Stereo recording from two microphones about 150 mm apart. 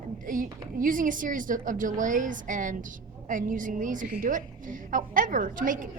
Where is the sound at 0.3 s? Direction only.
65° right (ahead or behind).